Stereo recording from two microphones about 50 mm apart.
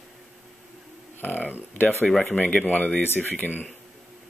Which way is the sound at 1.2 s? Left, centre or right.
Left.